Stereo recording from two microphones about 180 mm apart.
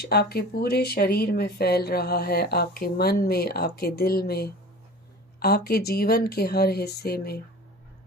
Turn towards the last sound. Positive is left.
turn(degrees=60)  # may be behind; listen again after turning